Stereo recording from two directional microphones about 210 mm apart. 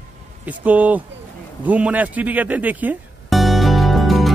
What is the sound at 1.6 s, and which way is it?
Music, 5° right (ahead or behind).